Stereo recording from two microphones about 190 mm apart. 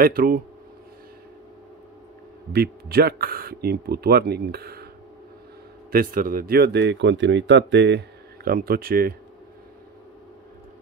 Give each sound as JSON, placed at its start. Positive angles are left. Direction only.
{"t": 0.0, "sound": "speech", "side_deg": -50}
{"t": 2.5, "sound": "speech", "side_deg": -55}
{"t": 5.9, "sound": "speech", "side_deg": -50}
{"t": 8.5, "sound": "speech", "side_deg": -50}